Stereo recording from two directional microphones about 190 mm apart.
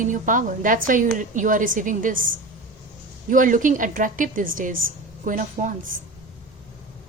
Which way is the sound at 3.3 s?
45° right (ahead or behind).